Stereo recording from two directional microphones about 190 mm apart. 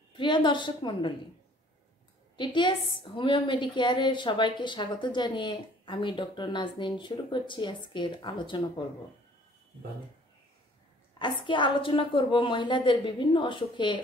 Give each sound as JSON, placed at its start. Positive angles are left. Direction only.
{"t": 0.1, "sound": "a woman's voice", "side_deg": 25}
{"t": 2.3, "sound": "a woman's voice", "side_deg": 25}
{"t": 11.1, "sound": "a woman's voice", "side_deg": 25}